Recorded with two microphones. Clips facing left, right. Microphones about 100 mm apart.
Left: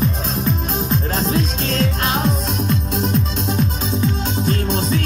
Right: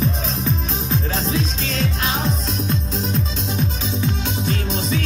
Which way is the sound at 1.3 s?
50° left (ahead or behind).